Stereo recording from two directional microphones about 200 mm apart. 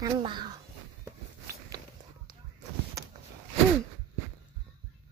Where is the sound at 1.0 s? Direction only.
15° right (ahead or behind).